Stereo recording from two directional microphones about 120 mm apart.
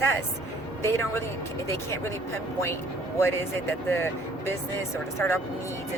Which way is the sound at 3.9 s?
20° left (ahead or behind).